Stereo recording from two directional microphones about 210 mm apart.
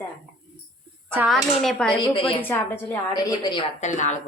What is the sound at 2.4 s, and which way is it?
A woman's voice, 10° left (ahead or behind).